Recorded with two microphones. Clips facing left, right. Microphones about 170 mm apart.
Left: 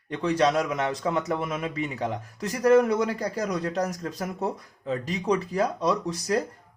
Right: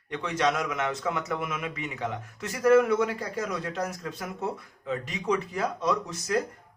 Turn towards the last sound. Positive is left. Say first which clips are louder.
# left 2 dB
turn(degrees=35)  # may be behind; listen again after turning